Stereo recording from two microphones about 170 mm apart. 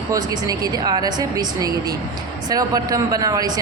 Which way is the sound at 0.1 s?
20° right (ahead or behind).